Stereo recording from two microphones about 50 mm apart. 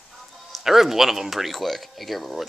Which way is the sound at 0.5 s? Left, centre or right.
Centre.